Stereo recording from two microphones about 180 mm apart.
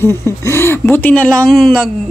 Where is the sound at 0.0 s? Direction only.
15° left (ahead or behind).